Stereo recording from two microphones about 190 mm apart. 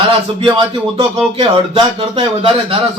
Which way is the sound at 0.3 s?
25° right (ahead or behind).